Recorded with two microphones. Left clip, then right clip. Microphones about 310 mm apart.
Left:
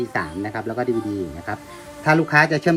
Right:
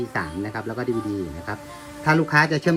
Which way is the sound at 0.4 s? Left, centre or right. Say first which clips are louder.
Left 4 dB; left.